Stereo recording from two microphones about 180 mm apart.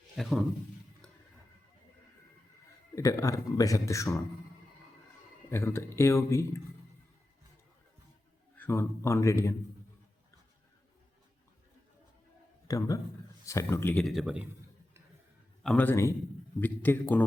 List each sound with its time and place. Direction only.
0.2 s a man's voice: centre (ahead or behind)
2.9 s speech: 15° left (ahead or behind)
5.5 s speech: 15° left (ahead or behind)
8.5 s speech: 10° left (ahead or behind)
12.6 s a man's voice: 20° left (ahead or behind); by 14.4 s 5° right (ahead or behind)
15.6 s speech: 10° left (ahead or behind)